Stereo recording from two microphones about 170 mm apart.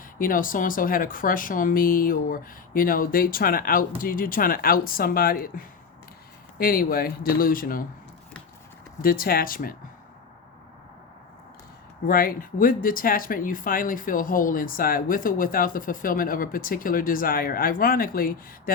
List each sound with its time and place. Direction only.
0.2 s speech: 55° left (ahead or behind)
9.0 s speech: 60° left (ahead or behind)
12.0 s speech: 55° left (ahead or behind)